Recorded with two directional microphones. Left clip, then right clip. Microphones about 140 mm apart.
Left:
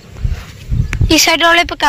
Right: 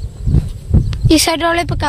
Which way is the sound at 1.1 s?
40° right (ahead or behind).